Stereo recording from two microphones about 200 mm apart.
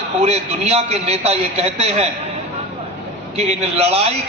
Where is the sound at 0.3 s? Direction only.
30° right (ahead or behind).